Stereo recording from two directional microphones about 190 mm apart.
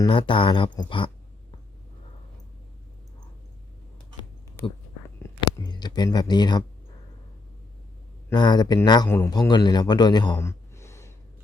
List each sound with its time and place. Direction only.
0.0 s speech: 25° left (ahead or behind)
5.4 s speech: 20° left (ahead or behind)
8.3 s a man's voice: 25° left (ahead or behind)
10.3 s a sound: 15° left (ahead or behind)